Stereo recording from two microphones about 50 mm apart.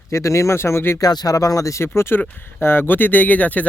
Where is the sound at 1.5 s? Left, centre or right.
Left.